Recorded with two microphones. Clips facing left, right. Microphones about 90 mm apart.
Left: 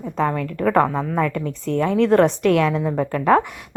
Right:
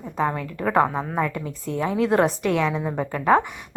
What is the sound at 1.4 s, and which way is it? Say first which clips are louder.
Speech: left 5 dB; 80° left.